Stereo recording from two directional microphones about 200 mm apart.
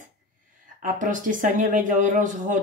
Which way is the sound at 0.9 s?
40° right (ahead or behind).